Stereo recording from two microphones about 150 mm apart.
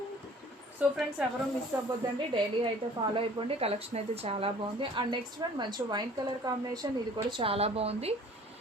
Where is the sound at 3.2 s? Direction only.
40° right (ahead or behind).